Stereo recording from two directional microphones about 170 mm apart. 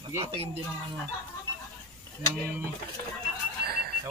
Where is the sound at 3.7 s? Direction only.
65° right (ahead or behind).